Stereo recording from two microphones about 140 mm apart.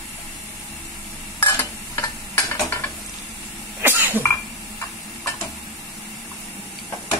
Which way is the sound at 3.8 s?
15° right (ahead or behind).